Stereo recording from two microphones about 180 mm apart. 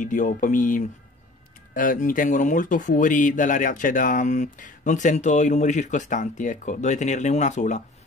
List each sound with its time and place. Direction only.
0.0 s speech: 45° left (ahead or behind)